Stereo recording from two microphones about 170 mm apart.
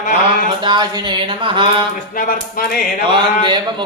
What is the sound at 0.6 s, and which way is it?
Speech, 25° right (ahead or behind).